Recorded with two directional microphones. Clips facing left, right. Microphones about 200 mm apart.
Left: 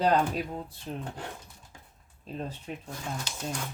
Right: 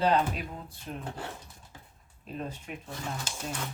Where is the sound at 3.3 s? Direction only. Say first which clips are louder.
Right 1 dB; 50° right (ahead or behind).